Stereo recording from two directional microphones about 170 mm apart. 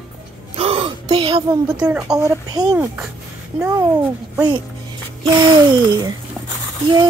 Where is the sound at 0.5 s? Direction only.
35° right (ahead or behind).